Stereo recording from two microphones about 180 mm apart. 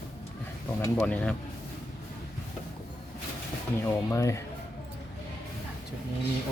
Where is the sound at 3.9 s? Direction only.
15° left (ahead or behind).